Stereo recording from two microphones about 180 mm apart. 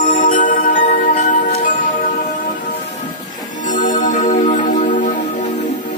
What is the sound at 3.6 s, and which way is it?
Music, 45° left (ahead or behind).